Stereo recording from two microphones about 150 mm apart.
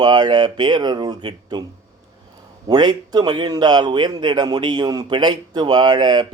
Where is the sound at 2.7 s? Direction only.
30° right (ahead or behind).